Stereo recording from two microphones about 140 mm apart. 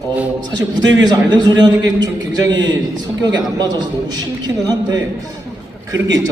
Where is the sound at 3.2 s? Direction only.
30° right (ahead or behind).